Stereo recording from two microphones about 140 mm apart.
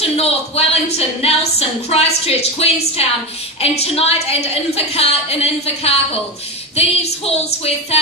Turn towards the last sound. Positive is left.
turn(degrees=45)  # may be behind; listen again after turning